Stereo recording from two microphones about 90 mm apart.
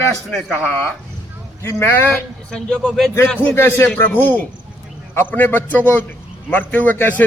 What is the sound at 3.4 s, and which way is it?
A man's voice, 25° left (ahead or behind).